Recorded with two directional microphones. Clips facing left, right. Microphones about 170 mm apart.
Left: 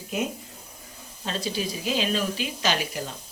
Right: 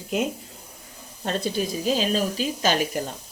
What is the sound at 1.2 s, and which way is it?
Speech, 55° right (ahead or behind).